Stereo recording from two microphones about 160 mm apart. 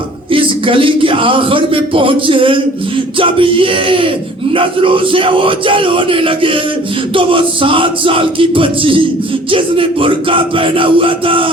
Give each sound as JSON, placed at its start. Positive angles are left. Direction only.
{"t": 0.3, "sound": "a man's voice", "side_deg": -35}